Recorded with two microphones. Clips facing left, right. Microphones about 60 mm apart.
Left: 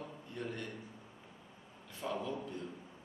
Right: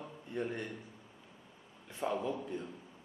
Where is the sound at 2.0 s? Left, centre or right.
Right.